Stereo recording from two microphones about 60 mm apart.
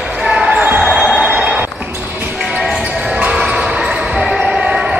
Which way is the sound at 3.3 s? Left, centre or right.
Centre.